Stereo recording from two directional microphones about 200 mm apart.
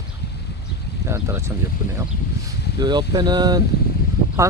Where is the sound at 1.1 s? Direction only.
15° right (ahead or behind).